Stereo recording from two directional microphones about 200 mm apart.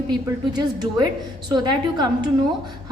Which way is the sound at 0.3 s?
20° right (ahead or behind).